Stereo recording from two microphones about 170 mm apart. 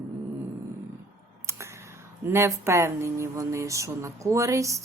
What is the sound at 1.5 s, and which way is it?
Speech, 15° right (ahead or behind).